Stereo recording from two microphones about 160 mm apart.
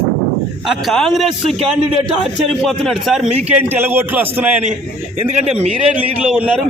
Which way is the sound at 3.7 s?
15° right (ahead or behind).